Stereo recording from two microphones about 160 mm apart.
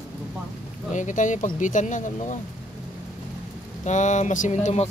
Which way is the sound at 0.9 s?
50° left (ahead or behind).